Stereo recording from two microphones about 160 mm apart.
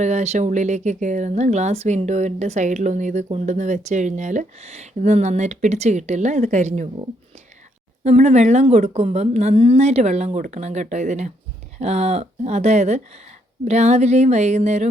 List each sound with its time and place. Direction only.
0.0 s speech: 45° right (ahead or behind)
8.0 s speech: 45° right (ahead or behind)